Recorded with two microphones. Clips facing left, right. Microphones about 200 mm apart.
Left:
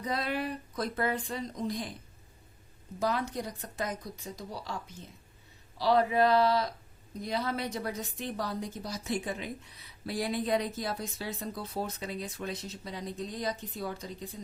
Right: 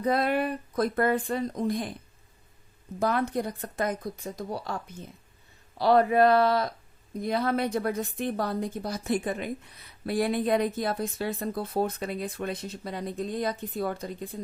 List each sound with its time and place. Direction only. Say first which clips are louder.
0.0 s a woman's voice: right 7 dB; 55° right (ahead or behind)
3.0 s a woman's voice: right 5 dB; 55° right (ahead or behind)